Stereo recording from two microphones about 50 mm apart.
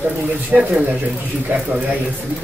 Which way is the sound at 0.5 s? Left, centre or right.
Right.